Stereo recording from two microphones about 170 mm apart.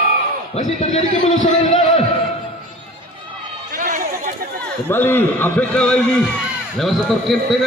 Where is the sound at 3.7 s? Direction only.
50° right (ahead or behind).